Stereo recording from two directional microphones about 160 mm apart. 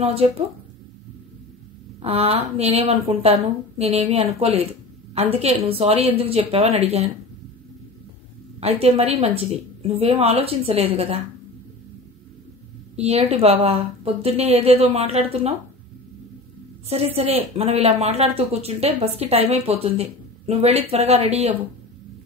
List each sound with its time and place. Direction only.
0.0 s speech: 40° right (ahead or behind)
2.0 s speech: 40° right (ahead or behind)
8.5 s speech: 40° right (ahead or behind)
12.9 s speech: 40° right (ahead or behind)
16.9 s speech: 40° right (ahead or behind)